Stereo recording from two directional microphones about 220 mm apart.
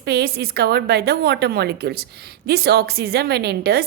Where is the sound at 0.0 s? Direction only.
45° right (ahead or behind).